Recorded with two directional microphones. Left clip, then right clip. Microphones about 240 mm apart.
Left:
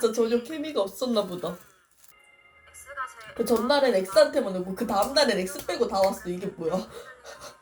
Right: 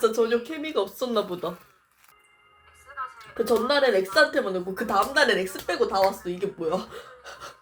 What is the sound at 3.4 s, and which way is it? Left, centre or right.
Speech, centre.